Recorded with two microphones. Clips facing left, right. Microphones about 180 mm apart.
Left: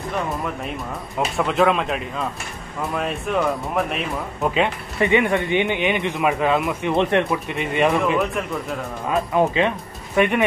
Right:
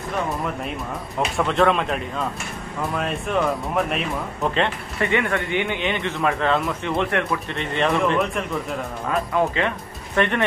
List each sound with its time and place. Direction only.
1.3 s speech: centre (ahead or behind)
4.9 s speech: 15° left (ahead or behind); by 8.7 s centre (ahead or behind)
9.1 s speech: 20° left (ahead or behind)